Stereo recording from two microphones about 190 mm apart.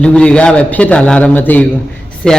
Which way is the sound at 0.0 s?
5° left (ahead or behind).